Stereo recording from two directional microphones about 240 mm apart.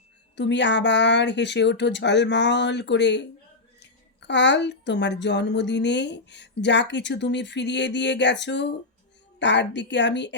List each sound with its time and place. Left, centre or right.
0.3 s a woman's voice: left